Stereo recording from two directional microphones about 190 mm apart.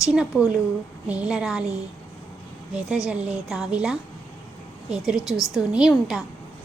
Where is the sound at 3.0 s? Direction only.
5° right (ahead or behind).